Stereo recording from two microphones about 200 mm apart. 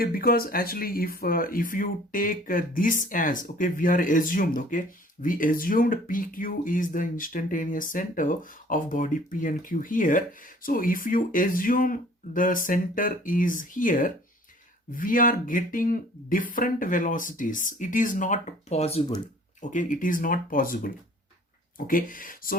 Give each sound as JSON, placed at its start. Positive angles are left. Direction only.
{"t": 0.0, "sound": "speech", "side_deg": 45}